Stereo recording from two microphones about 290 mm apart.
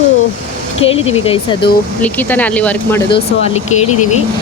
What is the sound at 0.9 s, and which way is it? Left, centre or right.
Speech, centre.